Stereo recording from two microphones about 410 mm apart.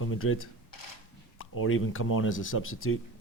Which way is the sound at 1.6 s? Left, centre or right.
Left.